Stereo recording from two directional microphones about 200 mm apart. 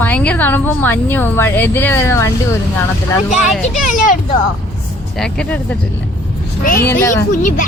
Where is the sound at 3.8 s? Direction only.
40° left (ahead or behind).